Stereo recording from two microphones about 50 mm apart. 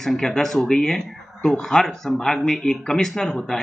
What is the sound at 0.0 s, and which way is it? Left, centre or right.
Speech, centre.